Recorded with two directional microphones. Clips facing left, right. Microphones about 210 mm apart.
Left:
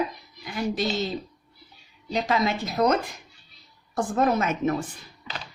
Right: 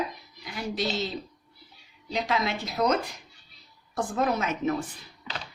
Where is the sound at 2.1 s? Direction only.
45° left (ahead or behind).